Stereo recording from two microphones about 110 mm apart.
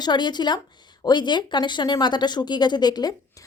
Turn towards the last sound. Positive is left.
turn(degrees=40)  # may be behind; listen again after turning